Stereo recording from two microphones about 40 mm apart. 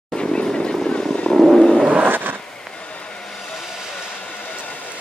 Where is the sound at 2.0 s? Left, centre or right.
Right.